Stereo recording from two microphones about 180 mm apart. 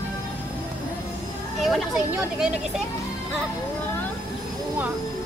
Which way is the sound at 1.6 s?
Centre (ahead or behind).